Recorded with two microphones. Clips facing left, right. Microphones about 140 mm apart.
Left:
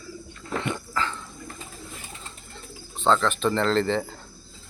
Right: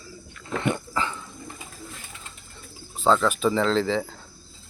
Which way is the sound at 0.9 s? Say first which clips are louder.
Right 1 dB; 15° right (ahead or behind).